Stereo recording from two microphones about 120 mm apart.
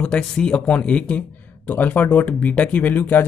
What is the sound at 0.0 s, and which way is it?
Speech, 5° left (ahead or behind).